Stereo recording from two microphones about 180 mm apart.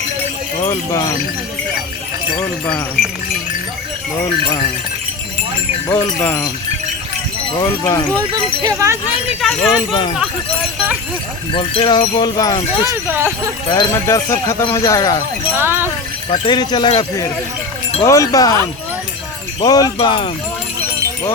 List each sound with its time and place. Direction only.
0.6 s speech: 15° left (ahead or behind)
5.9 s speech: 10° left (ahead or behind)
7.5 s speech: 20° left (ahead or behind)
8.6 s speech: 15° right (ahead or behind)
9.4 s speech: centre (ahead or behind)
9.9 s speech: 25° left (ahead or behind)
11.5 s speech: 30° left (ahead or behind)
12.8 s speech: 15° right (ahead or behind)
13.7 s speech: 20° left (ahead or behind)
15.5 s speech: 15° right (ahead or behind)
16.3 s speech: 25° left (ahead or behind)
19.6 s speech: 20° left (ahead or behind)